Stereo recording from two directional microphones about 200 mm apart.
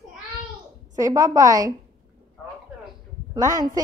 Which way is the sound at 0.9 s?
15° right (ahead or behind).